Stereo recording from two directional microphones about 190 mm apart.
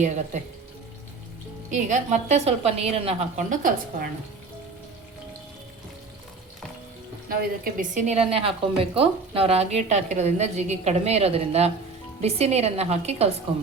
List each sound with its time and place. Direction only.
0.3 s a woman's voice: 40° right (ahead or behind)
1.7 s a woman's voice: 40° right (ahead or behind)
3.5 s a woman's voice: 45° right (ahead or behind)
7.3 s a woman's voice: 45° right (ahead or behind)